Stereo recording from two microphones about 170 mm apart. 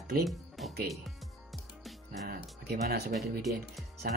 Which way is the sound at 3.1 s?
Centre (ahead or behind).